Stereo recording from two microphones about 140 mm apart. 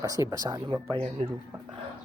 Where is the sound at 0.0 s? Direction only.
25° right (ahead or behind).